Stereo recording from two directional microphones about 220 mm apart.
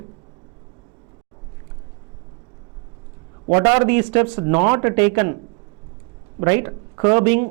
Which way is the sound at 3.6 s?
15° right (ahead or behind).